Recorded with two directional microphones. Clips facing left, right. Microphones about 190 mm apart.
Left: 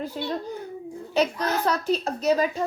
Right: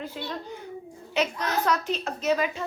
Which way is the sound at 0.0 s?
40° left (ahead or behind).